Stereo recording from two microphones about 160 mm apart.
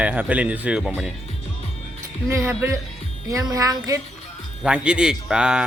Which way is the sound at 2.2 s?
15° right (ahead or behind).